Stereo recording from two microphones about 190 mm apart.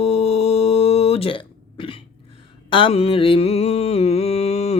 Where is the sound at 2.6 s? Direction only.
30° left (ahead or behind).